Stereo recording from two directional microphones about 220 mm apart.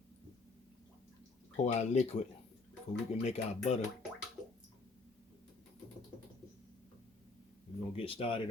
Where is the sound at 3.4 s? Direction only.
30° left (ahead or behind).